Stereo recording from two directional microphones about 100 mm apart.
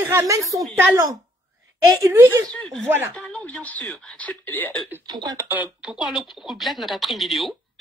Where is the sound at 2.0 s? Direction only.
25° right (ahead or behind).